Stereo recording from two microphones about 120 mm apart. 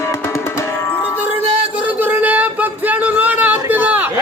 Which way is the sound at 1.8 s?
15° right (ahead or behind).